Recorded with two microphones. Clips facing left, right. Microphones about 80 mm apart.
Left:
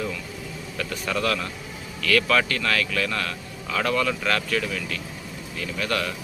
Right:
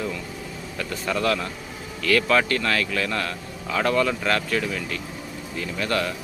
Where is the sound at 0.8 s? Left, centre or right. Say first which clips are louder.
Right 1 dB; right.